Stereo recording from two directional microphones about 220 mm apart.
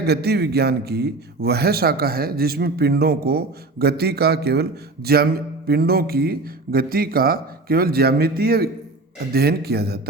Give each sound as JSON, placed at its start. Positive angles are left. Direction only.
{"t": 0.0, "sound": "a man's voice", "side_deg": -45}